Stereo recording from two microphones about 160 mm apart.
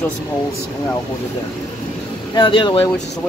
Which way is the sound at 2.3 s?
30° left (ahead or behind).